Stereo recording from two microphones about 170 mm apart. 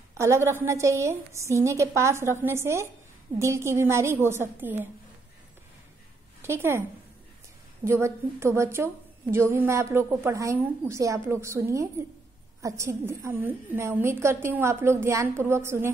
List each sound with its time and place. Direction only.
0.2 s a woman's voice: 15° right (ahead or behind)
6.4 s a woman's voice: 15° right (ahead or behind)
7.8 s a woman's voice: 15° right (ahead or behind)